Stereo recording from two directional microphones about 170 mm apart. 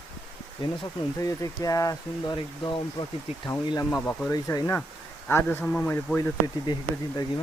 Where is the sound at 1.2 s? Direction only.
20° left (ahead or behind).